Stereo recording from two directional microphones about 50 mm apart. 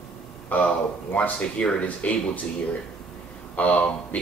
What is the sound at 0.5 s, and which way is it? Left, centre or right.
Speech, left.